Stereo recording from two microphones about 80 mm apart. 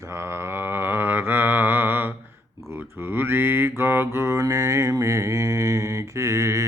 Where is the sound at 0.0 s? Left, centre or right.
Right.